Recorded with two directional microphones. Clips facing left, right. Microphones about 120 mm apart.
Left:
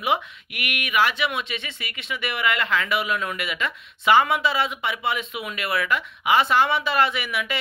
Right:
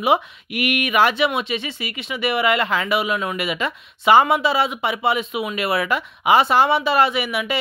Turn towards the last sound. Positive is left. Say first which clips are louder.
# right 4 dB
turn(degrees=-30)  # may be behind; listen again after turning